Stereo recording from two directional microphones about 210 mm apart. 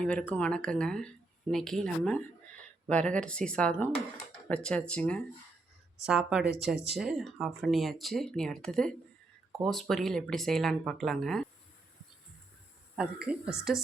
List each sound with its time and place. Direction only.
0.0 s speech: 5° left (ahead or behind)
13.0 s speech: 5° right (ahead or behind)